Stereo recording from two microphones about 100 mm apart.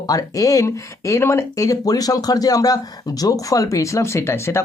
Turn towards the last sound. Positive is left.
turn(degrees=25)  # may be behind; listen again after turning